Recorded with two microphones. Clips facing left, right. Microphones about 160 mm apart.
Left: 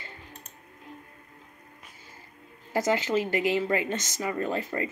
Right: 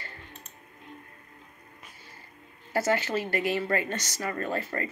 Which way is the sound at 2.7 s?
15° left (ahead or behind).